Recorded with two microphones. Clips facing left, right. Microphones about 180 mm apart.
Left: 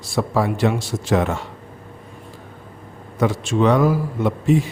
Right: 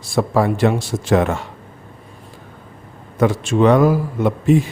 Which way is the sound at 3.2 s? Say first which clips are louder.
Right 3 dB; 50° right (ahead or behind).